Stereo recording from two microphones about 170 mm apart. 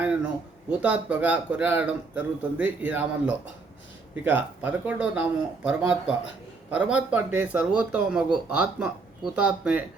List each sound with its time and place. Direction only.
0.7 s speech: 5° right (ahead or behind)